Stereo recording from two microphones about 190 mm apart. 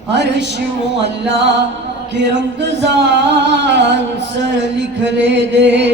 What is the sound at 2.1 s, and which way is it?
Music, 70° right (ahead or behind).